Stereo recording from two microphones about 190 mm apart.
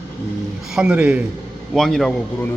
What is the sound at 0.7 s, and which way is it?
Speech, 5° right (ahead or behind).